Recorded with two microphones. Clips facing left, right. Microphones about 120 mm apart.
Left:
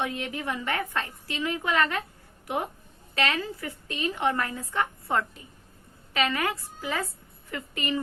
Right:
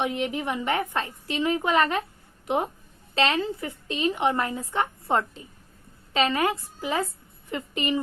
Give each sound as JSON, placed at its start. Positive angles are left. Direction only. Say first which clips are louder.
{"t": 0.0, "sound": "a woman's voice", "louder": "right 4 dB", "side_deg": -20}